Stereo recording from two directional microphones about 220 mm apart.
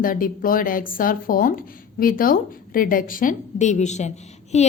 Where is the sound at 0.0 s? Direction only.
40° left (ahead or behind).